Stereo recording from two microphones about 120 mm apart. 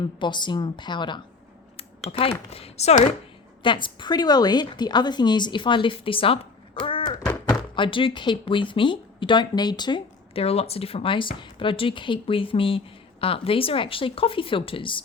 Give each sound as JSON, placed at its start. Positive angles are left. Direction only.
{"t": 0.0, "sound": "a woman's voice", "side_deg": 40}
{"t": 2.1, "sound": "speech", "side_deg": 50}
{"t": 3.6, "sound": "a woman's voice", "side_deg": 45}
{"t": 10.3, "sound": "speech", "side_deg": 55}